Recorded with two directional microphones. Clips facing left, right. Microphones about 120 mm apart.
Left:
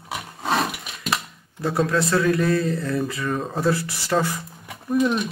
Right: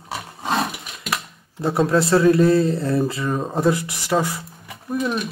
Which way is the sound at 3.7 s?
15° right (ahead or behind).